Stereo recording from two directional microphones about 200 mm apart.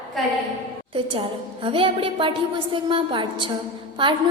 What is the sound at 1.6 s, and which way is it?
A woman's voice, 25° right (ahead or behind).